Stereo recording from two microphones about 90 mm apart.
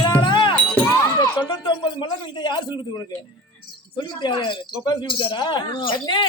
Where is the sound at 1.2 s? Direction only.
55° left (ahead or behind).